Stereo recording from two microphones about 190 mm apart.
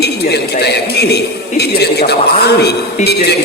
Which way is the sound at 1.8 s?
55° left (ahead or behind).